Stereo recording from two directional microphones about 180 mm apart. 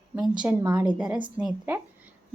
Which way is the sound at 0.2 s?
5° right (ahead or behind).